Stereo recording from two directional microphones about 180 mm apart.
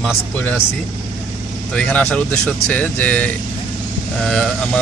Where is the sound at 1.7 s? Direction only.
5° left (ahead or behind).